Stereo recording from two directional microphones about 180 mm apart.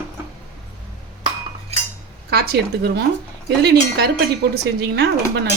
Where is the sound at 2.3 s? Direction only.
65° right (ahead or behind).